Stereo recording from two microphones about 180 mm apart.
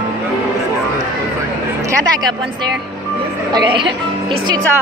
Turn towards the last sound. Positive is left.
turn(degrees=-25)  # may be behind; listen again after turning